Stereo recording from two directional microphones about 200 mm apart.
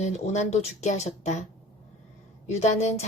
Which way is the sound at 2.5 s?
35° left (ahead or behind).